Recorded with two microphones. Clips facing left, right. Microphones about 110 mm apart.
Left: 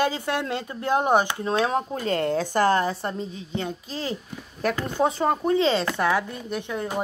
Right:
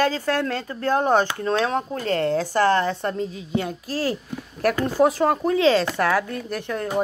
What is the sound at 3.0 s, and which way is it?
Speech, centre (ahead or behind).